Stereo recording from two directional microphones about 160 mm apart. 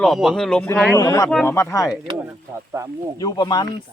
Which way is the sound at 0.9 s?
20° left (ahead or behind).